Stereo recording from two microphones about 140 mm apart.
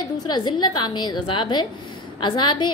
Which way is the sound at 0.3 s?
30° left (ahead or behind).